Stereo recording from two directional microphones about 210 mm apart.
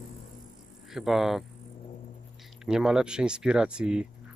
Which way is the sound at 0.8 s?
Centre (ahead or behind).